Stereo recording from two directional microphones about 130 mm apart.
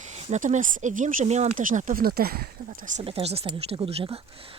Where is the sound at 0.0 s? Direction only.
60° right (ahead or behind); by 3.0 s 85° right.